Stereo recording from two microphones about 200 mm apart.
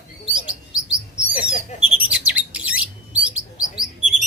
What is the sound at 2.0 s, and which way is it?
Bird, 5° right (ahead or behind).